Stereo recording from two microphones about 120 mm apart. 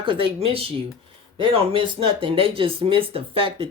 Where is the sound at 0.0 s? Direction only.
50° right (ahead or behind).